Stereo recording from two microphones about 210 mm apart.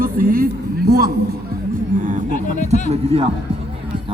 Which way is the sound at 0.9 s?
45° right (ahead or behind).